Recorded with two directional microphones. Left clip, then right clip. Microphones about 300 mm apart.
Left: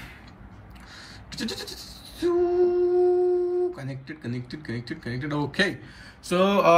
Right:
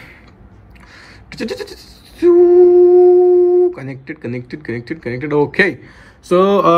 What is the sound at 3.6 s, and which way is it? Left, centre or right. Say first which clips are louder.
Speech: right 13 dB; centre.